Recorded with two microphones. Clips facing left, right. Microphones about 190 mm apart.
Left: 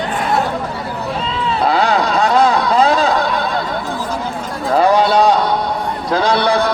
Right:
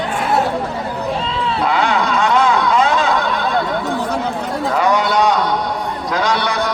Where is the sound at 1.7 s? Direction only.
35° left (ahead or behind).